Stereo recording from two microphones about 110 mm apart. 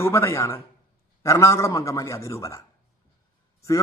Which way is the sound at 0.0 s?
25° left (ahead or behind).